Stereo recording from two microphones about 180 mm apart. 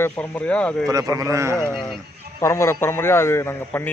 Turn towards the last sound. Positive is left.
turn(degrees=15)  # may be behind; listen again after turning